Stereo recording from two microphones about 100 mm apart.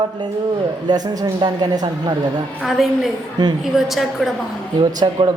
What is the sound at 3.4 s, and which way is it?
Speech, 45° right (ahead or behind).